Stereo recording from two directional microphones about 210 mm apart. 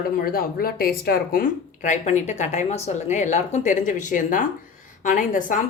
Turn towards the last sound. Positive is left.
turn(degrees=40)  # may be behind; listen again after turning